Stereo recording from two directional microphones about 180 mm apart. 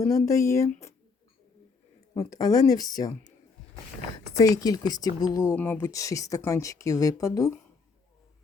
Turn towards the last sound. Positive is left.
turn(degrees=20)  # may be behind; listen again after turning